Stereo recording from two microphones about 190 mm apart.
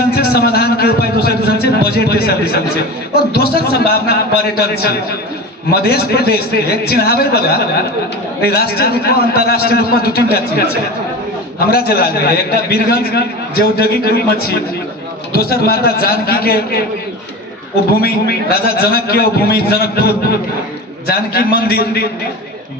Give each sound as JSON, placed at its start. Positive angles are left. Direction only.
{"t": 0.1, "sound": "a sound", "side_deg": 55}
{"t": 3.3, "sound": "a man's voice", "side_deg": 55}
{"t": 11.7, "sound": "a man's voice", "side_deg": 55}
{"t": 18.0, "sound": "a man's voice", "side_deg": 55}